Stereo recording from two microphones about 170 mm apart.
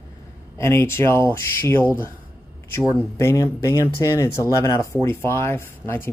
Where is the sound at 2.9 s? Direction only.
15° left (ahead or behind).